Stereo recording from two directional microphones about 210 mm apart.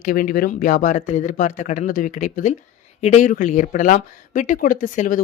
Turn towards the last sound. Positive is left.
turn(degrees=40)  # may be behind; listen again after turning